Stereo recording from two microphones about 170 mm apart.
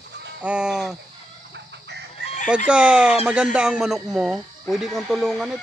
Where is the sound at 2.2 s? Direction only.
90° right.